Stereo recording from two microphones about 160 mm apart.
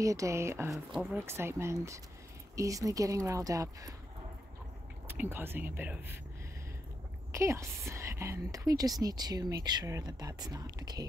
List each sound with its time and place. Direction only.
0.0 s a woman's voice: 20° right (ahead or behind)
5.0 s speech: 10° right (ahead or behind)
7.3 s a woman's voice: 20° right (ahead or behind)